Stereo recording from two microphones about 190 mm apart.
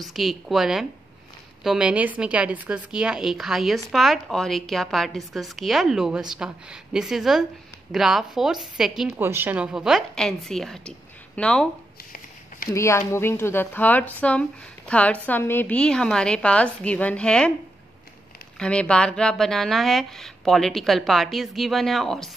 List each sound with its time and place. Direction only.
0.1 s speech: centre (ahead or behind)
12.7 s a woman's voice: 15° left (ahead or behind)
18.6 s speech: 5° left (ahead or behind)